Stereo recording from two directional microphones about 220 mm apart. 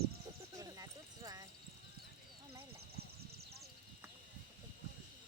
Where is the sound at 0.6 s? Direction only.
15° right (ahead or behind).